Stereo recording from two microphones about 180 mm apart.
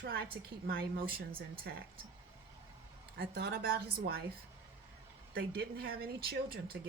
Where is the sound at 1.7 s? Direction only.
70° right (ahead or behind).